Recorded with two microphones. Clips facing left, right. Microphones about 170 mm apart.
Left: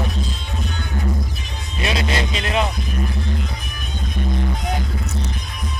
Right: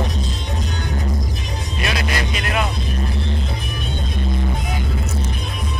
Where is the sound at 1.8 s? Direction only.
25° left (ahead or behind).